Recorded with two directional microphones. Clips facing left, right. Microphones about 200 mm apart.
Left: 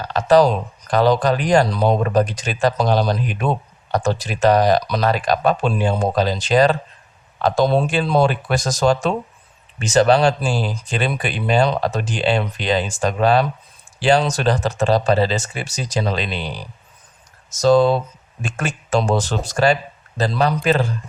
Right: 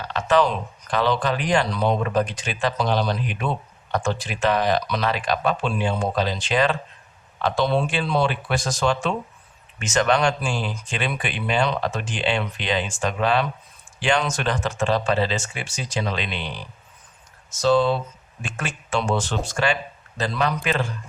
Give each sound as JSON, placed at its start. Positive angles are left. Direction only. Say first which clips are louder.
{"t": 0.0, "sound": "speech", "louder": "left 6 dB", "side_deg": 40}